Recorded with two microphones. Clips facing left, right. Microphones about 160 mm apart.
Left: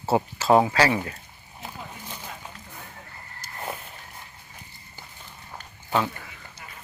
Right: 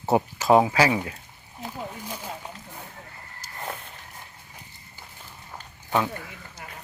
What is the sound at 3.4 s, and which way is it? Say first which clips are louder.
Walk: left 2 dB; 35° right (ahead or behind).